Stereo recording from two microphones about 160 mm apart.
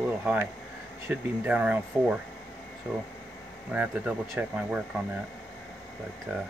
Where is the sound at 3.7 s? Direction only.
10° right (ahead or behind).